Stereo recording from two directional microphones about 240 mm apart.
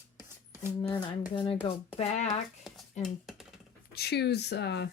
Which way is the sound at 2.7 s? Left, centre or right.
Centre.